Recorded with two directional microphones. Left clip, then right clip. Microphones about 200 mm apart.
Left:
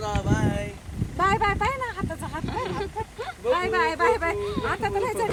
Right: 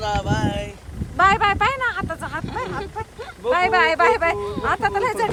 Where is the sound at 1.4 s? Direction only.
25° right (ahead or behind).